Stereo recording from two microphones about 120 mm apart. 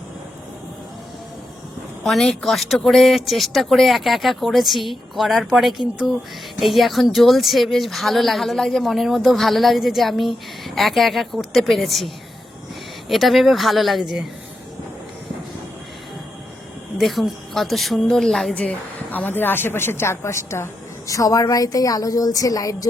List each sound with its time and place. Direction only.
2.0 s speech: centre (ahead or behind)
17.0 s a woman's voice: centre (ahead or behind); by 22.9 s 30° left (ahead or behind)